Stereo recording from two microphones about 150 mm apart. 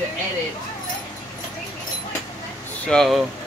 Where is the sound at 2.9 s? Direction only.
Centre (ahead or behind).